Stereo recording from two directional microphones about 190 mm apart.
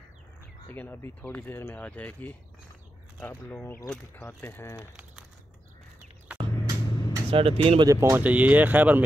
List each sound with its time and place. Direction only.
0.7 s speech: 10° left (ahead or behind)
6.3 s a sound: 20° right (ahead or behind)
7.2 s speech: 30° right (ahead or behind)
7.9 s speech: 15° right (ahead or behind)